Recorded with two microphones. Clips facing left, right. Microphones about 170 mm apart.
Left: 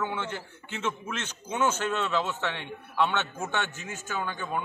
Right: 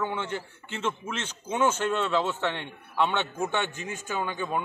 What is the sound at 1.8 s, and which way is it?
Speech, 5° left (ahead or behind).